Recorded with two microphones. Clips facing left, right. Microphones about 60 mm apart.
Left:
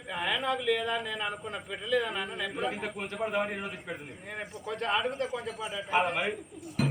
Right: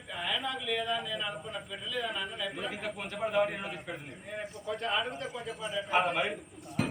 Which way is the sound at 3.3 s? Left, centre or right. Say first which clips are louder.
Right 4 dB; centre.